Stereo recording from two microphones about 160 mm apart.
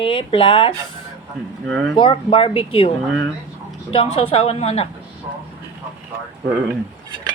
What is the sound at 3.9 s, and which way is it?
Speech, 35° left (ahead or behind).